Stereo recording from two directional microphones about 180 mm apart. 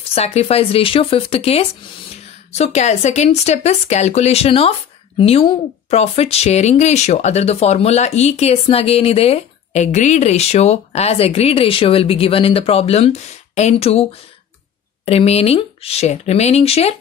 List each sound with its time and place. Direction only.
0.1 s speech: 35° left (ahead or behind)
15.0 s speech: 35° left (ahead or behind)